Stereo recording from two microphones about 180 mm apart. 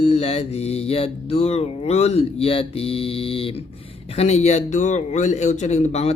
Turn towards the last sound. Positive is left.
turn(degrees=35)  # may be behind; listen again after turning